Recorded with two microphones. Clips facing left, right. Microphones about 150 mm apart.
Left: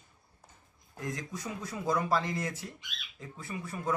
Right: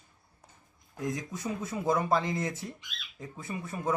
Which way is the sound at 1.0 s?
20° right (ahead or behind).